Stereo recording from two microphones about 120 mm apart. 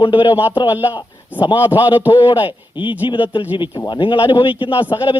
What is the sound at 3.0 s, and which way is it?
Speech, 40° left (ahead or behind).